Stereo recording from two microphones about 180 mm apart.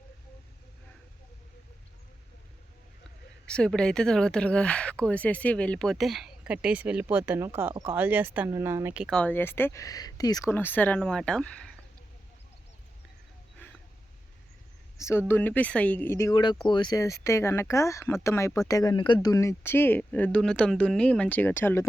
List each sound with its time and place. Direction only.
3.4 s speech: 5° left (ahead or behind); by 9.0 s 10° right (ahead or behind)
9.0 s speech: 5° left (ahead or behind)
14.9 s speech: 15° left (ahead or behind)
16.3 s speech: 25° left (ahead or behind)